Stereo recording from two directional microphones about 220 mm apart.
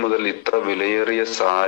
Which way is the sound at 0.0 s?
45° left (ahead or behind).